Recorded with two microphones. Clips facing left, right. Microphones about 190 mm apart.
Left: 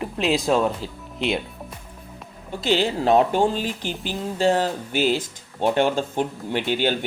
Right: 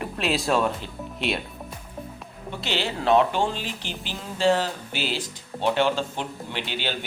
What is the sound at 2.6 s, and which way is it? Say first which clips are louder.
Speech: left 4 dB; 40° left (ahead or behind).